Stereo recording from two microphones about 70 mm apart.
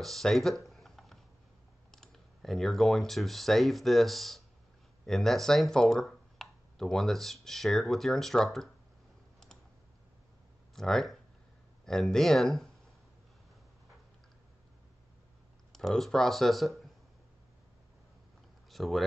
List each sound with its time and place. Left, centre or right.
0.0 s speech: centre
0.7 s a sound: centre
1.9 s speech: centre
10.7 s speech: centre
15.7 s speech: centre
18.7 s speech: centre